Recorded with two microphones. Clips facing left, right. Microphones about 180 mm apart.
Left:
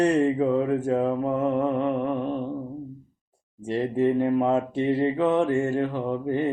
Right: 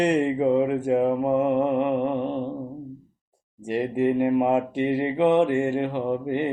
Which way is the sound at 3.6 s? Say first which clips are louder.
Even; 15° right (ahead or behind).